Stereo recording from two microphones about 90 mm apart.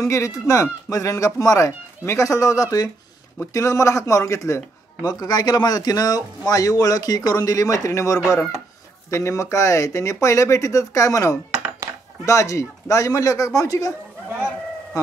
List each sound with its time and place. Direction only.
0.0 s speech: 35° left (ahead or behind)
5.2 s a man's voice: 50° left (ahead or behind)